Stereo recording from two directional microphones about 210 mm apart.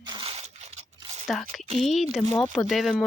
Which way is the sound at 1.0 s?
30° right (ahead or behind).